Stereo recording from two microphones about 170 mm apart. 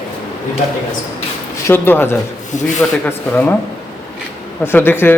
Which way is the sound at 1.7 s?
15° left (ahead or behind).